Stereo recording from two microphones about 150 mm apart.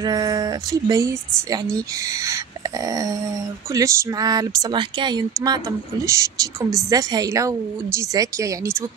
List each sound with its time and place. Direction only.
0.0 s speech: 25° right (ahead or behind)
2.9 s speech: 25° right (ahead or behind)